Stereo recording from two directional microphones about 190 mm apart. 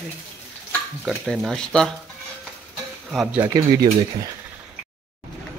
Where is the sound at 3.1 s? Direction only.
5° right (ahead or behind).